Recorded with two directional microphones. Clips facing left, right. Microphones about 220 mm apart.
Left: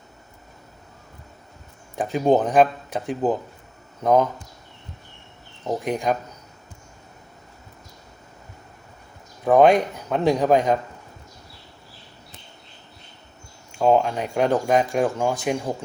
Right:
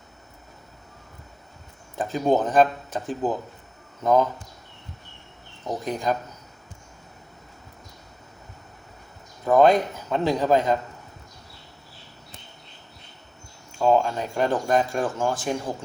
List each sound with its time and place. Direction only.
2.0 s speech: 15° left (ahead or behind)
5.6 s speech: 15° left (ahead or behind)
9.5 s speech: 15° left (ahead or behind)
13.7 s speech: 15° left (ahead or behind)